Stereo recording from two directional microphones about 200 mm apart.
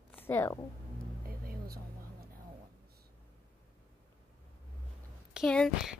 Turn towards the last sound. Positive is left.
turn(degrees=0)  # may be behind; listen again after turning